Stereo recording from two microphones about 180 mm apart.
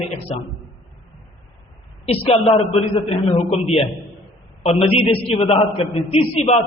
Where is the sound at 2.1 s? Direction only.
30° left (ahead or behind).